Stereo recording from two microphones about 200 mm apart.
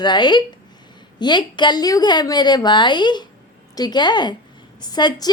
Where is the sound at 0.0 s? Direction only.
20° left (ahead or behind).